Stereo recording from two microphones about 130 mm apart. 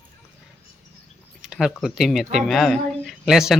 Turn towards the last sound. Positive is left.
turn(degrees=0)  # may be behind; listen again after turning